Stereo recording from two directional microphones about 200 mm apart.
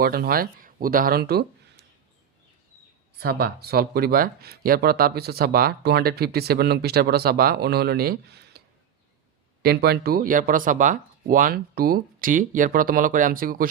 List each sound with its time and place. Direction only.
0.0 s speech: 50° right (ahead or behind)
3.2 s speech: 50° right (ahead or behind)
9.6 s speech: 50° right (ahead or behind)